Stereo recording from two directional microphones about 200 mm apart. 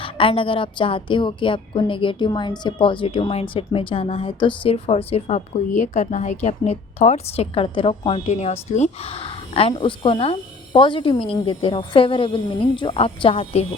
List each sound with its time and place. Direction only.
0.0 s a woman's voice: 25° left (ahead or behind)